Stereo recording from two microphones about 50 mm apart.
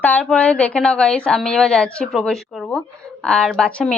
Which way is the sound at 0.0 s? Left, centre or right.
Left.